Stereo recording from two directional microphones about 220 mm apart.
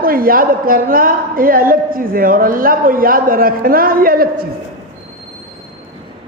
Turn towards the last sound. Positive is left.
turn(degrees=-40)  # may be behind; listen again after turning